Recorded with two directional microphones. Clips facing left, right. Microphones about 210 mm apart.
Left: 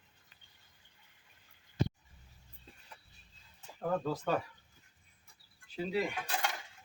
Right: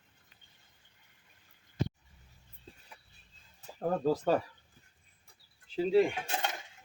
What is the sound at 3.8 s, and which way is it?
Speech, 35° right (ahead or behind).